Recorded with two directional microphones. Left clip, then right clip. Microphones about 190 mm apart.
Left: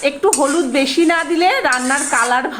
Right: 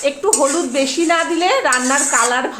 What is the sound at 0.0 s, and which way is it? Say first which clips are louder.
A woman's voice: left 1 dB; 15° left (ahead or behind).